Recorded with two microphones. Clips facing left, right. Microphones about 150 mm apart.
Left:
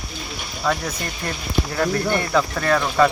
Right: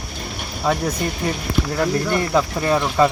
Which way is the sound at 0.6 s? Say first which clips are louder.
Right 3 dB; 10° right (ahead or behind).